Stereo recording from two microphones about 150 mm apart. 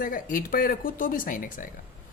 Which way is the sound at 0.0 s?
65° left (ahead or behind).